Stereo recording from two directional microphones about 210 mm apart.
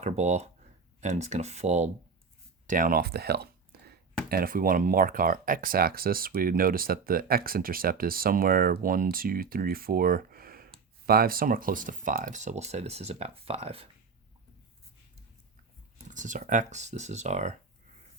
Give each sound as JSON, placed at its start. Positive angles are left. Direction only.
{"t": 0.0, "sound": "speech", "side_deg": -35}
{"t": 16.0, "sound": "speech", "side_deg": -35}